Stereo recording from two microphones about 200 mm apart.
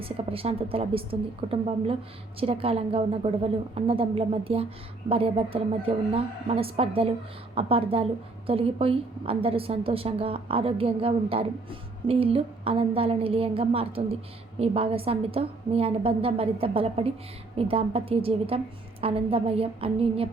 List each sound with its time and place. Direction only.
0.0 s a woman's voice: 30° right (ahead or behind)